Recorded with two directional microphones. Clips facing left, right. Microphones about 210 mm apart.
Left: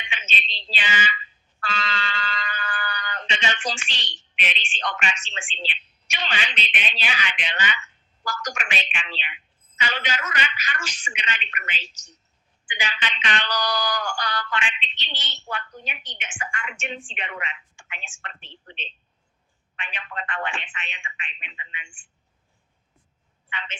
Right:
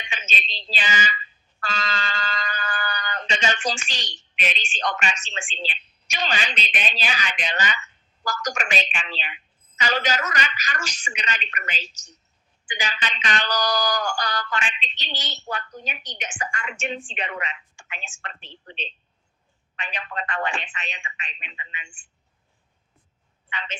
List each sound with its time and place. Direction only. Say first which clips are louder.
0.0 s a woman's voice: right 1 dB; 40° right (ahead or behind)
23.5 s speech: right 2 dB; 40° right (ahead or behind)